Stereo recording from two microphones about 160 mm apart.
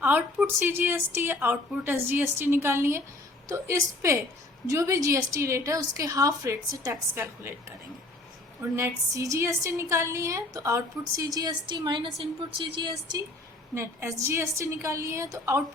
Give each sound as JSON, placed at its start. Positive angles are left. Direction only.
{"t": 0.0, "sound": "a woman's voice", "side_deg": -10}
{"t": 8.7, "sound": "a woman's voice", "side_deg": -20}
{"t": 13.7, "sound": "a woman's voice", "side_deg": -15}